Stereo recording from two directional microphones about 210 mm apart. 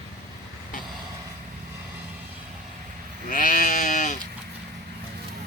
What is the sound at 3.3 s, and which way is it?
Sheep, 40° left (ahead or behind).